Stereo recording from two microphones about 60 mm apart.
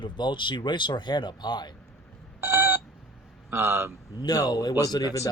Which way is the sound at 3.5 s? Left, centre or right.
Right.